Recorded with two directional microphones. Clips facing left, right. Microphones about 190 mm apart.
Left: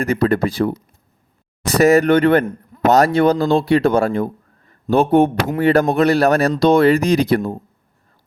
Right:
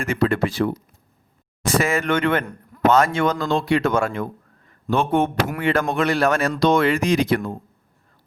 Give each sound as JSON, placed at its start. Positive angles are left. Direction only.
{"t": 0.0, "sound": "speech", "side_deg": 35}